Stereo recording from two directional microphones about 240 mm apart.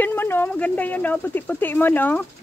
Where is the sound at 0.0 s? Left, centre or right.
Centre.